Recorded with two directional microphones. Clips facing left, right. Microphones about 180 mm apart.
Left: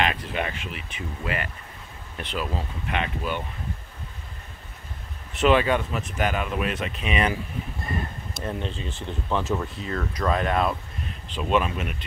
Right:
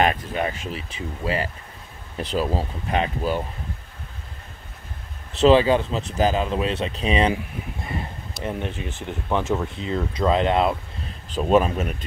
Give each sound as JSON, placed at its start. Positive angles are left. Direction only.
{"t": 0.0, "sound": "speech", "side_deg": -40}
{"t": 5.4, "sound": "speech", "side_deg": -30}
{"t": 8.5, "sound": "speech", "side_deg": -15}
{"t": 11.2, "sound": "speech", "side_deg": -40}